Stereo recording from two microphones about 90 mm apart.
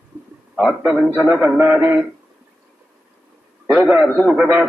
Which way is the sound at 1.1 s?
20° right (ahead or behind).